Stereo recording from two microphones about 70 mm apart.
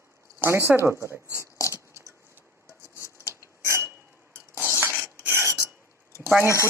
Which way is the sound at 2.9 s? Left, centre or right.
Left.